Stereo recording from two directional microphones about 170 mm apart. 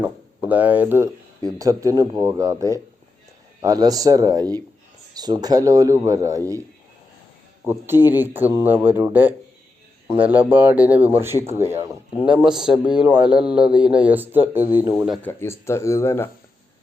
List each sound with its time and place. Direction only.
0.0 s speech: 10° right (ahead or behind)
7.6 s speech: 15° right (ahead or behind)
15.1 s speech: 10° left (ahead or behind)